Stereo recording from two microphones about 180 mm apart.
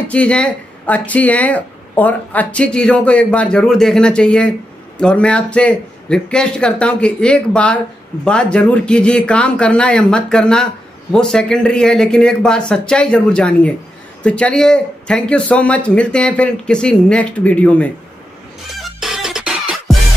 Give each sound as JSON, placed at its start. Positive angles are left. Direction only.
{"t": 0.1, "sound": "speech", "side_deg": 5}
{"t": 18.8, "sound": "music", "side_deg": 0}